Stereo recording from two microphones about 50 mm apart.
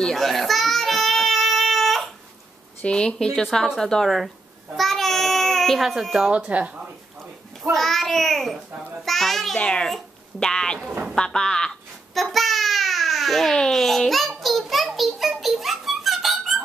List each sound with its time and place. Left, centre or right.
0.0 s baby cry: centre
2.8 s speech: centre
4.7 s child singing: centre
6.2 s speech: right
7.7 s a sound: centre
9.6 s speech: centre
9.8 s speech: centre
11.1 s babbling: centre